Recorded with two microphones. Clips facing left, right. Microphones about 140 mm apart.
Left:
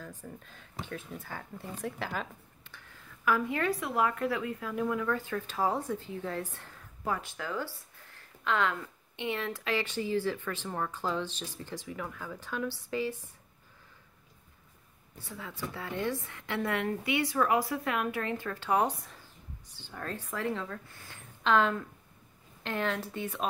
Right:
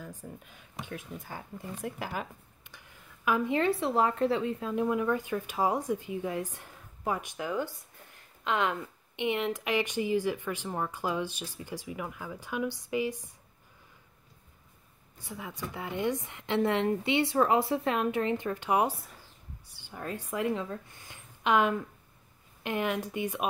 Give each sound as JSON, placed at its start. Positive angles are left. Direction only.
{"t": 0.0, "sound": "speech", "side_deg": -15}
{"t": 15.1, "sound": "a woman's voice", "side_deg": -15}